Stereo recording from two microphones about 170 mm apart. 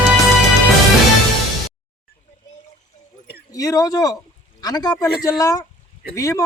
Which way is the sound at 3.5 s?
20° left (ahead or behind).